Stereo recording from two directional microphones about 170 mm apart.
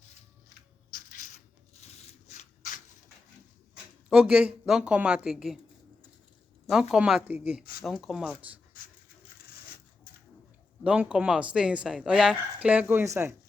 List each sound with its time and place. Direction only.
1.8 s a sound: 40° left (ahead or behind)
4.1 s speech: 5° right (ahead or behind)
6.7 s speech: 5° right (ahead or behind)
8.7 s dog: 55° left (ahead or behind)
10.8 s speech: 5° right (ahead or behind)